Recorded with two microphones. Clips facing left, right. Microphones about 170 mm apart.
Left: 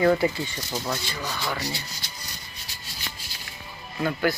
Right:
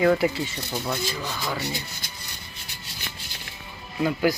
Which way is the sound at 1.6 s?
50° right (ahead or behind).